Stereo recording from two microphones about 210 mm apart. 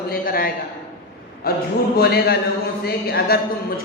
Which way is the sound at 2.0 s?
50° left (ahead or behind).